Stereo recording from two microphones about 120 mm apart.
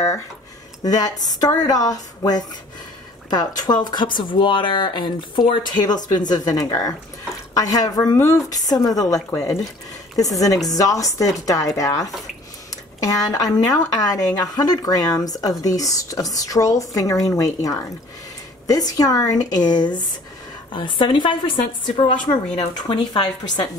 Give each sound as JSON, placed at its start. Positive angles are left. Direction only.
{"t": 0.8, "sound": "a woman's voice", "side_deg": 30}
{"t": 22.8, "sound": "speech", "side_deg": 40}